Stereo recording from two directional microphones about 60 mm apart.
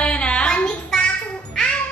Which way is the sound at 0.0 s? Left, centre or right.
Left.